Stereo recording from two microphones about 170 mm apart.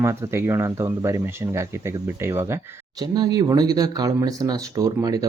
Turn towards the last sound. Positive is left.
turn(degrees=-20)  # may be behind; listen again after turning